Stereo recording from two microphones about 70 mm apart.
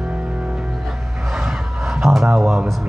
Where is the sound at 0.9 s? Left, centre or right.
Centre.